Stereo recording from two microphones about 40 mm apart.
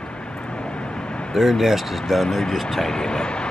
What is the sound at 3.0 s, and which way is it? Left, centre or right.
Speech, left.